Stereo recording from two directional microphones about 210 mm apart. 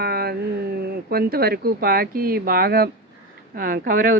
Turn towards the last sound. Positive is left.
turn(degrees=-40)  # may be behind; listen again after turning